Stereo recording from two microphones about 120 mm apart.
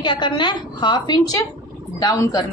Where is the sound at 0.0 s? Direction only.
40° left (ahead or behind).